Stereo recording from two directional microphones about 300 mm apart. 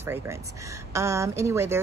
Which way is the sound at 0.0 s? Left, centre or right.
Centre.